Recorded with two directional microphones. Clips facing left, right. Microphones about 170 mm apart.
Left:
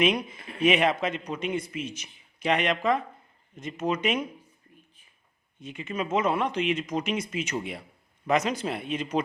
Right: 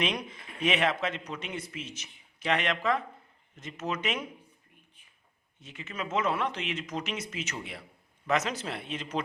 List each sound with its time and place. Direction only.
0.0 s speech: 10° left (ahead or behind)
5.6 s speech: 15° left (ahead or behind)